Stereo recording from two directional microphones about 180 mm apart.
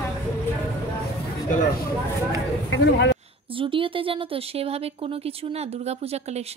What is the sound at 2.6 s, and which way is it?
Speech, 80° left.